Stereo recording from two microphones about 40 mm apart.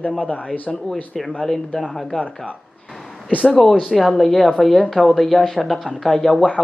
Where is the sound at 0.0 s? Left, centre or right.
Left.